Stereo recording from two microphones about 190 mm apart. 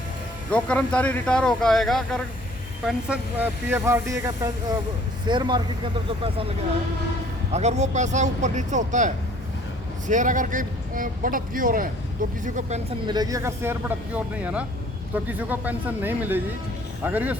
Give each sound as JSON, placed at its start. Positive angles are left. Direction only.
{"t": 0.5, "sound": "speech", "side_deg": 5}
{"t": 7.5, "sound": "a man's voice", "side_deg": -35}
{"t": 13.1, "sound": "speech", "side_deg": -20}